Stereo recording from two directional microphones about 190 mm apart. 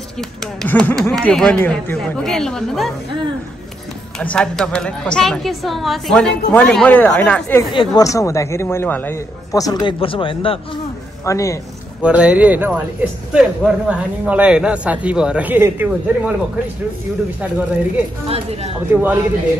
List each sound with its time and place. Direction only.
0.2 s a woman's voice: 5° left (ahead or behind)
4.2 s a woman's voice: 5° left (ahead or behind)
7.7 s a man's voice: 25° left (ahead or behind)
11.2 s a man's voice: 15° left (ahead or behind)
12.0 s speech: 5° right (ahead or behind)
17.4 s speech: 10° right (ahead or behind)